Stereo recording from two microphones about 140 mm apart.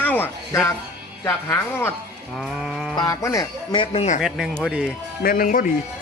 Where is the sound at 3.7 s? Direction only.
40° left (ahead or behind).